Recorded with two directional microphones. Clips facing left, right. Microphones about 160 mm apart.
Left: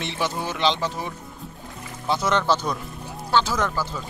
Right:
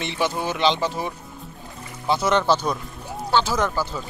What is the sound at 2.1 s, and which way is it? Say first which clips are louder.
Speech: right 2 dB; 10° right (ahead or behind).